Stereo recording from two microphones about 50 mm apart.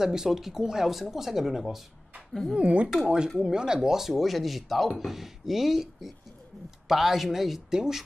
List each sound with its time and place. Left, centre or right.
0.0 s speech: centre
2.5 s speech: right
3.3 s speech: centre